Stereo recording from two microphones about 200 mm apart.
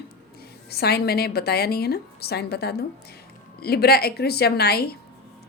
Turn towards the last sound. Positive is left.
turn(degrees=50)  # may be behind; listen again after turning